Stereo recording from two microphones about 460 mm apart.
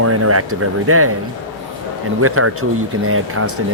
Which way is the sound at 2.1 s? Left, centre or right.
Right.